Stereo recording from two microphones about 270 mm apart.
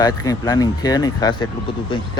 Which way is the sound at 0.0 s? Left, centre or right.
Centre.